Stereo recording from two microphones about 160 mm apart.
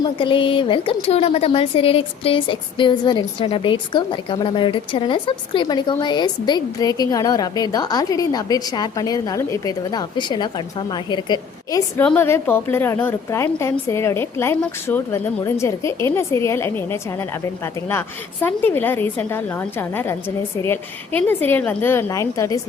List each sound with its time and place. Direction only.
0.0 s a woman's voice: 30° left (ahead or behind)
11.9 s a woman's voice: 15° left (ahead or behind)